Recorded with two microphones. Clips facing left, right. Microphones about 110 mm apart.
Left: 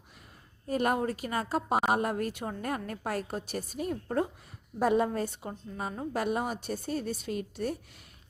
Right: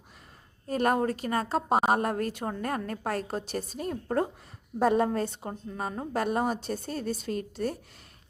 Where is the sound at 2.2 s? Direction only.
10° left (ahead or behind).